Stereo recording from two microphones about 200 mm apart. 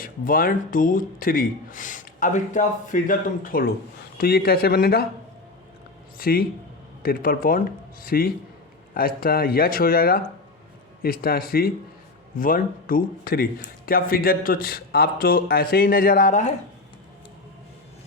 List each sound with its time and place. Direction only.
0.0 s speech: 45° left (ahead or behind)
6.1 s a man's voice: 45° left (ahead or behind)